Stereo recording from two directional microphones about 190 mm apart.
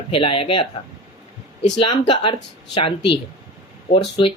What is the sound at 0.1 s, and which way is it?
Speech, 30° left (ahead or behind).